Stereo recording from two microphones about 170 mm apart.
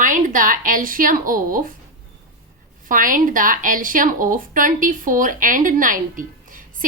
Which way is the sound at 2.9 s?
55° right (ahead or behind).